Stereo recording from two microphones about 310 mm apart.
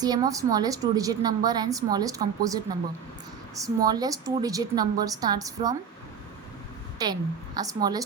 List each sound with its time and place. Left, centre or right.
0.0 s a woman's voice: centre
7.0 s a woman's voice: centre